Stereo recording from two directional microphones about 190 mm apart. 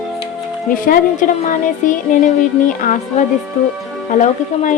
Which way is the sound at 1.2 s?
45° left (ahead or behind).